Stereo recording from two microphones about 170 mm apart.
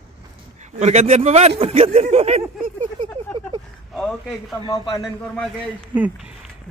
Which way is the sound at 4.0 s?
5° left (ahead or behind).